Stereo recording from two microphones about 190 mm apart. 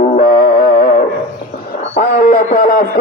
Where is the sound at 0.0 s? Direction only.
45° left (ahead or behind).